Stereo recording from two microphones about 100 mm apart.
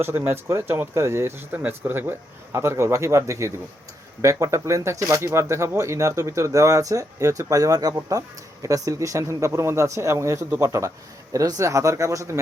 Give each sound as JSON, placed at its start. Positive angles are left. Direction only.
{"t": 0.0, "sound": "speech", "side_deg": -25}